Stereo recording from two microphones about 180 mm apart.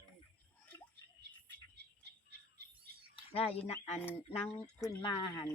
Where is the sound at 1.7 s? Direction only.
65° right (ahead or behind).